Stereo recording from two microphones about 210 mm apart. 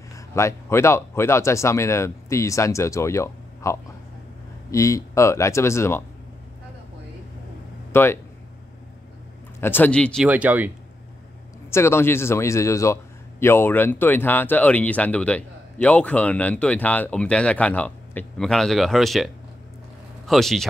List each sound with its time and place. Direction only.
0.1 s a man's voice: 15° left (ahead or behind)
7.9 s speech: 10° left (ahead or behind)
9.6 s a man's voice: 10° left (ahead or behind)
10.2 s speech: 5° right (ahead or behind)
11.7 s a man's voice: 10° left (ahead or behind)